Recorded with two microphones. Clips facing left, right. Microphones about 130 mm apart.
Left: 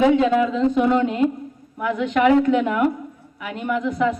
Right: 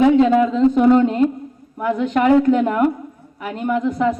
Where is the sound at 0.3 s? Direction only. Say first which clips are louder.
Right 4 dB; 35° right (ahead or behind).